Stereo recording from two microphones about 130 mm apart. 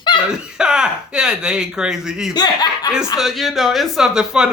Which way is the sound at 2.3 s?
30° left (ahead or behind).